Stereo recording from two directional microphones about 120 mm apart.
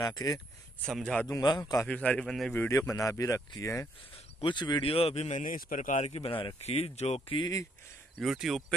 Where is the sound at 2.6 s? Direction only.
25° left (ahead or behind).